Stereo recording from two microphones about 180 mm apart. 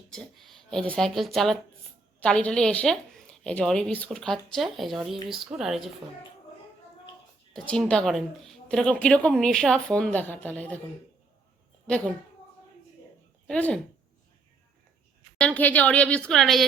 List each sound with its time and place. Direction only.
0.1 s a woman's voice: centre (ahead or behind)
7.5 s a woman's voice: 5° left (ahead or behind)
13.5 s a woman's voice: 5° left (ahead or behind)
15.4 s a woman's voice: 10° left (ahead or behind)